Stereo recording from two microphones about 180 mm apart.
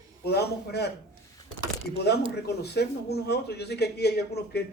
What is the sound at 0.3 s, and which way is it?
Speech, 65° left (ahead or behind).